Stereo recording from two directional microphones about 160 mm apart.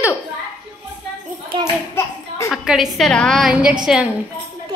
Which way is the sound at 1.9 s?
15° left (ahead or behind).